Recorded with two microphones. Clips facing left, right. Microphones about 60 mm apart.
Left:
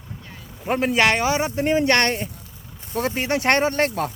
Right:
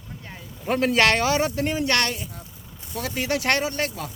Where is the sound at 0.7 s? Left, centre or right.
Left.